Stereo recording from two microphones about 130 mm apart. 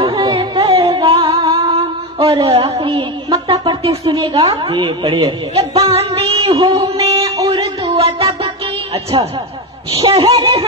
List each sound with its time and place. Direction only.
0.0 s music: 45° right (ahead or behind)
1.4 s music: 30° right (ahead or behind)
1.7 s speech: 45° right (ahead or behind)
7.9 s music: 50° right (ahead or behind)
9.9 s a woman's voice: 50° right (ahead or behind)